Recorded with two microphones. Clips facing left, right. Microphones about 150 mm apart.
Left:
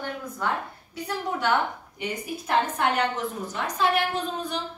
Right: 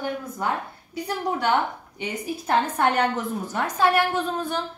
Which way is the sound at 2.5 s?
40° right (ahead or behind).